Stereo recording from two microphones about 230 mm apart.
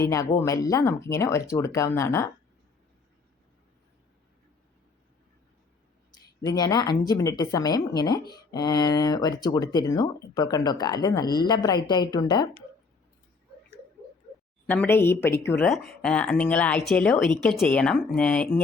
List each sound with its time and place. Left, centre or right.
0.0 s speech: centre
6.1 s speech: centre
14.7 s speech: centre